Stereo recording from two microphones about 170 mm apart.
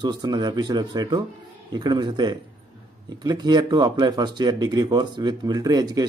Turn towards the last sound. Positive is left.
turn(degrees=-25)  # may be behind; listen again after turning